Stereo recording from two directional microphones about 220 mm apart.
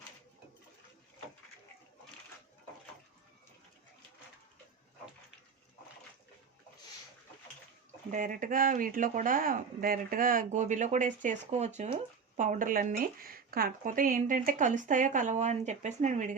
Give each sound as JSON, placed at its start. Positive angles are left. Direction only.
{"t": 8.1, "sound": "speech", "side_deg": -35}